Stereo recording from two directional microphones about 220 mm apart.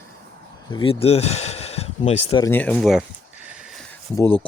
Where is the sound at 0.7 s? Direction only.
25° left (ahead or behind).